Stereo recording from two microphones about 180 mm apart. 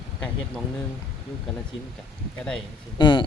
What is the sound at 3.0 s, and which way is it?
Speech, 25° left (ahead or behind).